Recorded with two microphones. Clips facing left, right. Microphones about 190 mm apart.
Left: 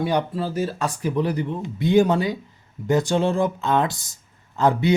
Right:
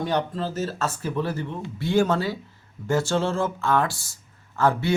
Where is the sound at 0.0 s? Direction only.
10° left (ahead or behind).